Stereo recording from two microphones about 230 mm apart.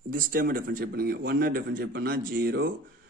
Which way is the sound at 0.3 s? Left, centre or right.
Right.